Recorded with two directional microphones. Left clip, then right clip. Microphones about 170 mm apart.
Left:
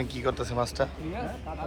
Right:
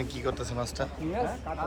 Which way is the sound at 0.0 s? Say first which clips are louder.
Left 3 dB; 5° right (ahead or behind).